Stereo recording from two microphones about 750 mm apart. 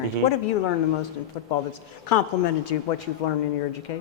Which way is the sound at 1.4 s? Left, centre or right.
Left.